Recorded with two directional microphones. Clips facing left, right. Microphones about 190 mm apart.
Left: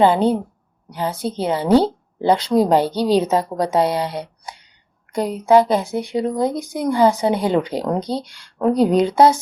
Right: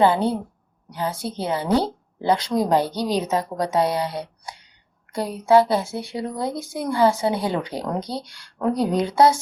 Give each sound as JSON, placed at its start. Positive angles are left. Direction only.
{"t": 0.0, "sound": "speech", "side_deg": 20}